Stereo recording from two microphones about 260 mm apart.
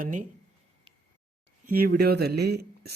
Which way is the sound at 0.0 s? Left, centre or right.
Right.